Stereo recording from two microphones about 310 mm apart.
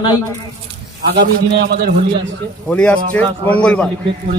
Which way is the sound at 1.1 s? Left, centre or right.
Right.